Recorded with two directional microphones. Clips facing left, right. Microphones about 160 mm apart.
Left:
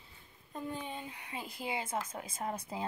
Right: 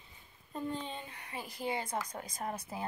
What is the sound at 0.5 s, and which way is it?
Speech, 10° left (ahead or behind).